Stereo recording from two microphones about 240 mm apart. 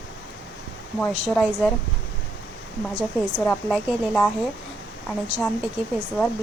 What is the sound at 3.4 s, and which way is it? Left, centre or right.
Speech, centre.